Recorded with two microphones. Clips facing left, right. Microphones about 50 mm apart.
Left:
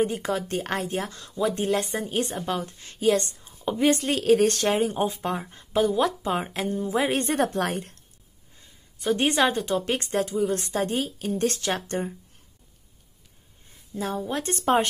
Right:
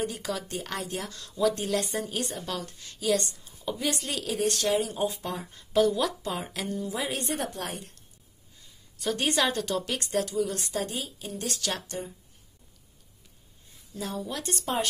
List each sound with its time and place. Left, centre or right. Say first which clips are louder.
0.0 s a woman's voice: left 7 dB; left
8.5 s a woman's voice: even; left
9.8 s speech: left 4 dB; left
10.5 s a woman's voice: left 6 dB; left
13.9 s a woman's voice: left 5 dB; left